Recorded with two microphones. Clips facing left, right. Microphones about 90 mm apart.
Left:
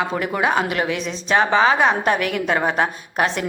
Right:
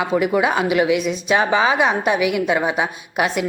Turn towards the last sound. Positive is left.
turn(degrees=-10)  # may be behind; listen again after turning